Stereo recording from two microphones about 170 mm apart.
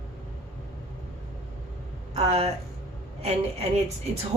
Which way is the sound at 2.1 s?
40° right (ahead or behind).